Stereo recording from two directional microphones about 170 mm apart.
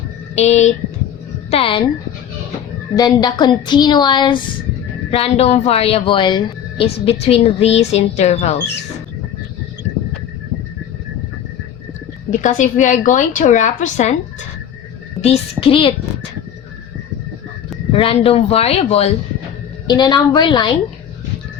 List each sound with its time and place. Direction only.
0.3 s a woman's voice: 40° left (ahead or behind)
2.9 s a woman's voice: 25° left (ahead or behind); by 8.5 s 40° left (ahead or behind)
12.3 s a woman's voice: 45° left (ahead or behind)
15.2 s a woman's voice: 35° left (ahead or behind)
17.9 s a woman's voice: 30° left (ahead or behind)
19.9 s a woman's voice: 25° left (ahead or behind)